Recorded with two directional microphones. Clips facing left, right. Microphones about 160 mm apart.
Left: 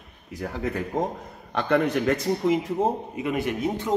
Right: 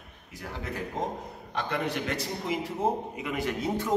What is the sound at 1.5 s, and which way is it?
Speech, 60° left (ahead or behind).